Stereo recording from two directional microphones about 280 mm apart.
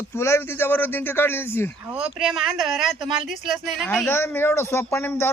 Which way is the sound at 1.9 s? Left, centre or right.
Centre.